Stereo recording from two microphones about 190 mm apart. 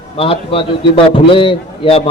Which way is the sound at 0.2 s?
30° left (ahead or behind).